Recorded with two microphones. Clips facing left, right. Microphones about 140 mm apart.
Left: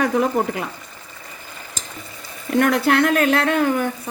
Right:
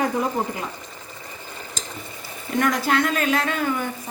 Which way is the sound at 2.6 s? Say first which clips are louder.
Left 4 dB; 60° left (ahead or behind).